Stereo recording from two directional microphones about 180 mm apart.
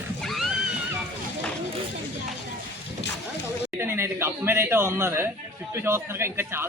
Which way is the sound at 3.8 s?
15° right (ahead or behind).